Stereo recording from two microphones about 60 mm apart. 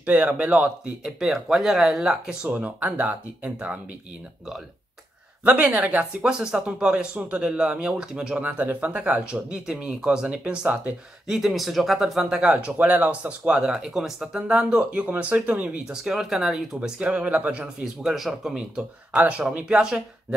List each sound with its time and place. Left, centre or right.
0.0 s speech: right
1.0 s speech: centre
2.5 s speech: right
5.4 s speech: right
8.4 s speech: right
11.2 s speech: centre
12.4 s speech: right
13.5 s speech: centre
15.9 s speech: centre
17.0 s speech: right
18.0 s speech: centre
19.1 s speech: right